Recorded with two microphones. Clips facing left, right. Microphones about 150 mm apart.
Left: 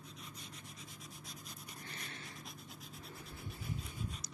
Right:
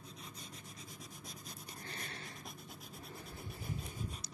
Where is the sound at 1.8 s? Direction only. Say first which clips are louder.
Right 3 dB; 40° right (ahead or behind).